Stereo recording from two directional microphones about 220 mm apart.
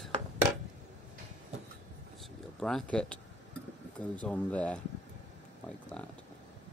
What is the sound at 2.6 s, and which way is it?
Rub, centre (ahead or behind).